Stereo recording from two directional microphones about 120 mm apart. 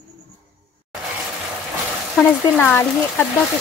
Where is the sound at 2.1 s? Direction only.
15° left (ahead or behind).